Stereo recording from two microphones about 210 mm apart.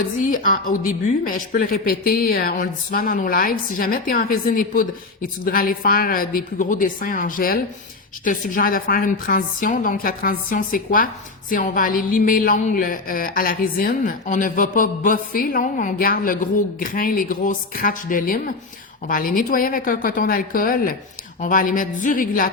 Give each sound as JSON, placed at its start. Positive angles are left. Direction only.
{"t": 0.2, "sound": "a woman's voice", "side_deg": 40}